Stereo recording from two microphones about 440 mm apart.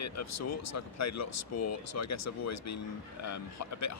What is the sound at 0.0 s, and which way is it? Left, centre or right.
Speech, left.